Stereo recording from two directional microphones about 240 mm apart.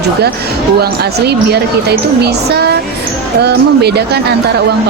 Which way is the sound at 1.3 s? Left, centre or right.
Right.